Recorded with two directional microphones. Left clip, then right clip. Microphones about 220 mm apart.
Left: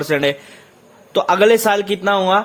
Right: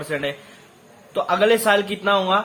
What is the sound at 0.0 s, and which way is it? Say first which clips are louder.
Speech: left 8 dB; 45° left (ahead or behind).